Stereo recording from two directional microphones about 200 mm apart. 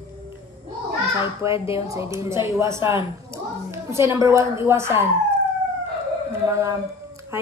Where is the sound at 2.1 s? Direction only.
15° right (ahead or behind).